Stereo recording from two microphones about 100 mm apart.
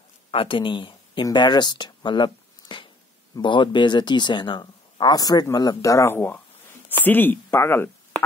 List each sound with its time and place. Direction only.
0.3 s speech: 65° left (ahead or behind); by 7.9 s 20° left (ahead or behind)